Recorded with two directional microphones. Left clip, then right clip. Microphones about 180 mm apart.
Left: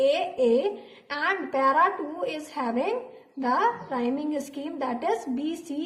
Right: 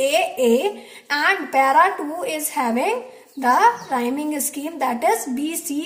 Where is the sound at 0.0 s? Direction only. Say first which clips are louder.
Right 5 dB; 35° right (ahead or behind).